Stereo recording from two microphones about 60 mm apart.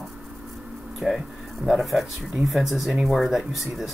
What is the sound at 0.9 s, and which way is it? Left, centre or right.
Speech, centre.